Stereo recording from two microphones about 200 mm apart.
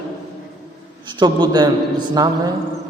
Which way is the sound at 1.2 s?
20° right (ahead or behind).